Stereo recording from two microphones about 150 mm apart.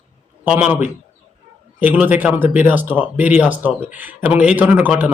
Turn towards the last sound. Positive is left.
turn(degrees=-10)  # may be behind; listen again after turning